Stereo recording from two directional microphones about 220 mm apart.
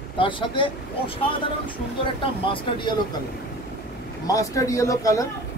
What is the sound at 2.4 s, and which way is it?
Speech, 20° left (ahead or behind).